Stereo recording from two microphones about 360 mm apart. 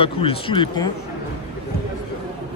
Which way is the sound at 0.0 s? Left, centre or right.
Centre.